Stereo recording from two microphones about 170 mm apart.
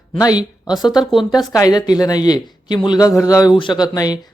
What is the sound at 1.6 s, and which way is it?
A man's voice, 20° left (ahead or behind).